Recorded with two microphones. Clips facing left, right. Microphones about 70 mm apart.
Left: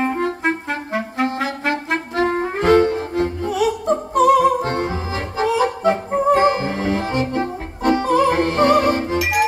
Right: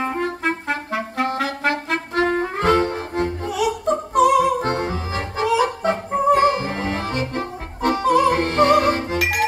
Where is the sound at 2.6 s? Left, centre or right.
Right.